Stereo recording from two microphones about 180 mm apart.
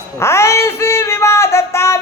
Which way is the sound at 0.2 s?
15° left (ahead or behind).